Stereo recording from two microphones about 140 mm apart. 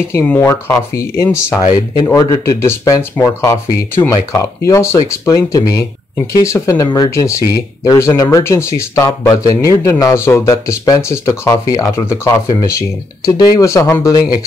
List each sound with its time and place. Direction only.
0.1 s speech: 20° left (ahead or behind)